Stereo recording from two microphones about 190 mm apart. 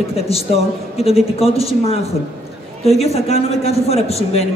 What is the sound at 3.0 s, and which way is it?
A man's voice, 35° left (ahead or behind).